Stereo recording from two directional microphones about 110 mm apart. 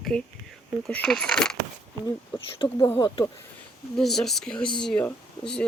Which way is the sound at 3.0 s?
35° left (ahead or behind).